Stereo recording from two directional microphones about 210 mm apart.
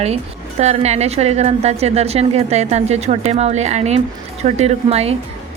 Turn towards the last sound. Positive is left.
turn(degrees=-30)  # may be behind; listen again after turning